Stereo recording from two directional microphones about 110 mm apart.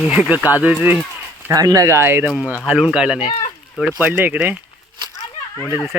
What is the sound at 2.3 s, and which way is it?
Speech, 10° right (ahead or behind).